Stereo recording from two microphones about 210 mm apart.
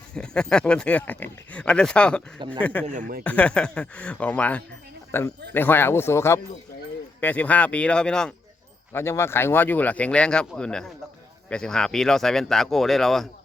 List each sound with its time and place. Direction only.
0.1 s speech: 5° left (ahead or behind)
2.8 s speech: 35° right (ahead or behind)
3.2 s speech: 5° left (ahead or behind)